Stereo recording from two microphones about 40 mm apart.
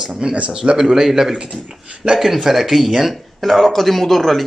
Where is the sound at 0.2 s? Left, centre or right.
Right.